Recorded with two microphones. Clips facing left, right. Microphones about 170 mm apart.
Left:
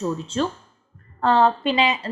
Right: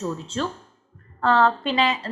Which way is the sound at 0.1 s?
20° left (ahead or behind).